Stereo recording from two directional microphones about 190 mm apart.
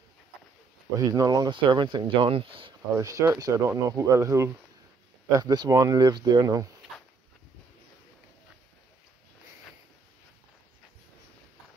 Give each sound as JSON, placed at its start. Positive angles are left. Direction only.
{"t": 0.9, "sound": "speech", "side_deg": -20}
{"t": 3.0, "sound": "speech", "side_deg": -15}